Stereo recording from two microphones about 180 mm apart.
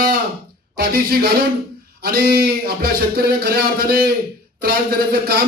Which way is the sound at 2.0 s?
55° right (ahead or behind).